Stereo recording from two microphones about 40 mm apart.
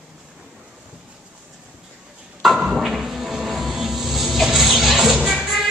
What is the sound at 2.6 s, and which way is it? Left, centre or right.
Music, centre.